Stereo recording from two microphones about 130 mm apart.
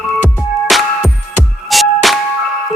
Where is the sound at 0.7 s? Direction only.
Centre (ahead or behind).